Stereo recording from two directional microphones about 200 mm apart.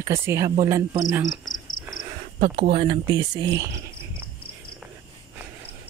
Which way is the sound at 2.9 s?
20° right (ahead or behind).